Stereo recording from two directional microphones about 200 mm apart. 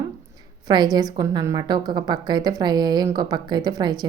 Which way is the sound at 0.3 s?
20° right (ahead or behind).